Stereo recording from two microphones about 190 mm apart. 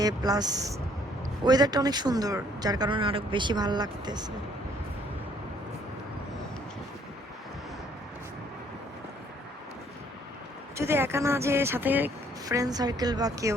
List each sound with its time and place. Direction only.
0.0 s speech: 20° right (ahead or behind)
10.8 s speech: 10° right (ahead or behind)